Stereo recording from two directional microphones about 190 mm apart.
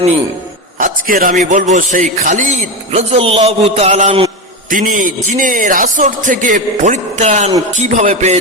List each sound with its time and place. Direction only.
0.8 s a man's voice: 45° right (ahead or behind)
4.7 s a man's voice: 45° right (ahead or behind)